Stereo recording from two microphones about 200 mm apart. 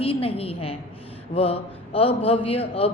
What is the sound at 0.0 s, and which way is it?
A woman's voice, 30° left (ahead or behind).